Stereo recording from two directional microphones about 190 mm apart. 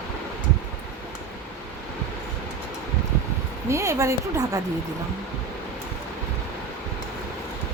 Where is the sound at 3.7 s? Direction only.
15° right (ahead or behind).